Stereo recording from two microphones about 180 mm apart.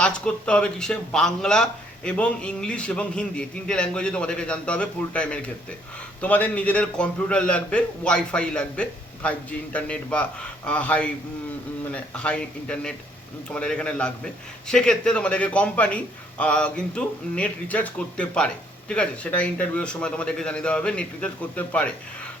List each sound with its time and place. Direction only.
0.0 s a man's voice: 5° left (ahead or behind)